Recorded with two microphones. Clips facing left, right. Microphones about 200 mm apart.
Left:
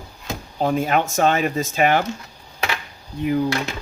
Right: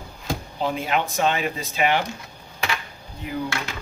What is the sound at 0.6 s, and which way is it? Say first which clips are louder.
Speech: left 5 dB; 45° left (ahead or behind).